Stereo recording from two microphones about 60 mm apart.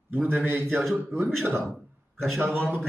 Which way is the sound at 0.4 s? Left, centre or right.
Right.